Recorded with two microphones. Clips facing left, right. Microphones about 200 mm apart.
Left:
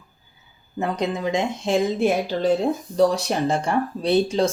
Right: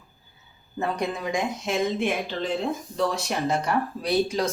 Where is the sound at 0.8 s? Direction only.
20° left (ahead or behind).